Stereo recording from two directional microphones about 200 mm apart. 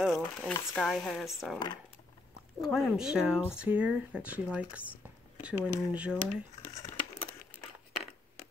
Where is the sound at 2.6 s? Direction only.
5° right (ahead or behind).